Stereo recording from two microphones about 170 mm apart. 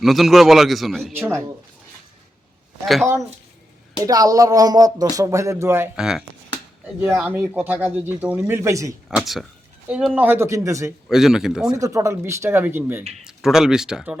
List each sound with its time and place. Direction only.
0.0 s a man's voice: centre (ahead or behind)
2.8 s a man's voice: centre (ahead or behind)
4.0 s speech: 20° right (ahead or behind)
6.0 s a man's voice: centre (ahead or behind); by 9.0 s 20° right (ahead or behind)
9.0 s speech: centre (ahead or behind); by 10.9 s 20° right (ahead or behind)
11.1 s a man's voice: 5° right (ahead or behind)
11.8 s a man's voice: 20° right (ahead or behind)